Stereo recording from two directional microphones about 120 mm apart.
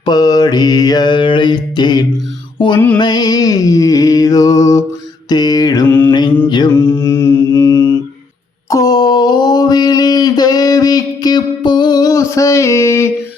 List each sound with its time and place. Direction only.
0.0 s mantra: 35° left (ahead or behind)
2.6 s music: 45° left (ahead or behind)
3.0 s mantra: 35° left (ahead or behind)
6.1 s music: 40° left (ahead or behind)
6.7 s mantra: 20° left (ahead or behind)
8.7 s a sound: 30° left (ahead or behind)